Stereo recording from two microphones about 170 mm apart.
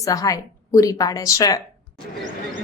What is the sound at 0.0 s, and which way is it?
Speech, 20° left (ahead or behind).